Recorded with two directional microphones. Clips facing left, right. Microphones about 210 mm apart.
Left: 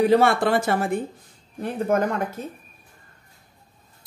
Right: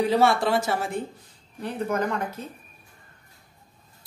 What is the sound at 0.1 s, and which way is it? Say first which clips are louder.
Speech: left 3 dB; 55° left (ahead or behind).